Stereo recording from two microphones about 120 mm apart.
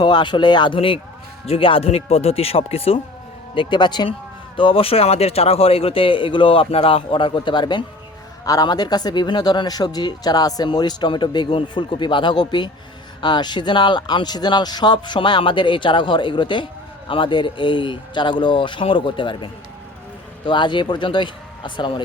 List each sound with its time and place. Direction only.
0.0 s speech: 40° left (ahead or behind)
3.5 s a man's voice: 45° left (ahead or behind)
20.5 s speech: 40° left (ahead or behind)